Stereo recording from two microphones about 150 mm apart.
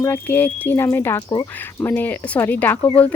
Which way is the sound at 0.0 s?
15° left (ahead or behind).